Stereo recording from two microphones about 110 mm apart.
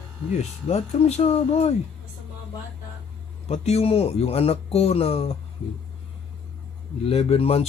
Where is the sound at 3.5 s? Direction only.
75° left (ahead or behind).